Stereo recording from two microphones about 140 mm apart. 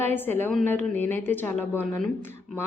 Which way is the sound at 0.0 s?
15° left (ahead or behind).